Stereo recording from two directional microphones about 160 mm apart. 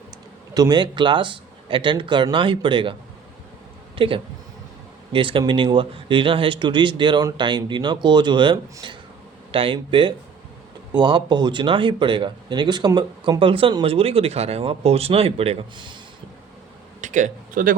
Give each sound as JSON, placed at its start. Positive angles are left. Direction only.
{"t": 0.5, "sound": "speech", "side_deg": -25}
{"t": 3.9, "sound": "speech", "side_deg": -35}
{"t": 17.0, "sound": "speech", "side_deg": -50}